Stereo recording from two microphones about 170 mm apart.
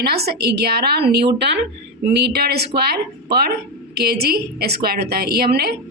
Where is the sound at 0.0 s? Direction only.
70° right (ahead or behind).